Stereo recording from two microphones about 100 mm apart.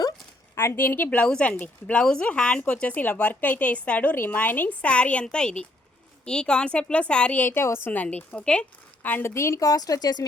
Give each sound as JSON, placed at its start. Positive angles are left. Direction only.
{"t": 0.5, "sound": "a woman's voice", "side_deg": 25}
{"t": 9.0, "sound": "a woman's voice", "side_deg": 25}